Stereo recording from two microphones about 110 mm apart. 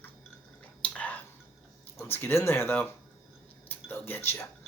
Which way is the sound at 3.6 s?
15° left (ahead or behind).